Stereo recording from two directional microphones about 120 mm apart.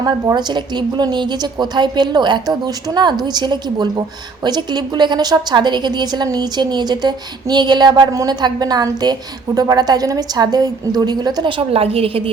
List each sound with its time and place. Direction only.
0.0 s a woman's voice: 35° right (ahead or behind); by 12.3 s 50° right (ahead or behind)